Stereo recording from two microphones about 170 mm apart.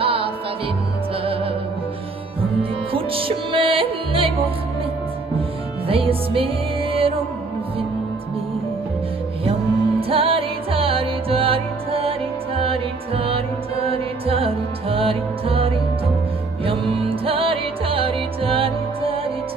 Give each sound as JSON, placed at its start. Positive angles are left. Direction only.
{"t": 0.0, "sound": "music", "side_deg": -30}
{"t": 2.9, "sound": "music", "side_deg": -30}
{"t": 5.9, "sound": "music", "side_deg": -35}
{"t": 9.4, "sound": "music", "side_deg": -35}